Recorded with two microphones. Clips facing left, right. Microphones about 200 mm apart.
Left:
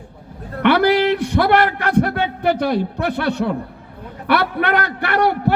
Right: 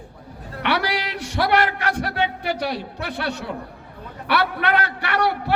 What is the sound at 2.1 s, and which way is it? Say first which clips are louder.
A man's voice: left 5 dB; 50° left (ahead or behind).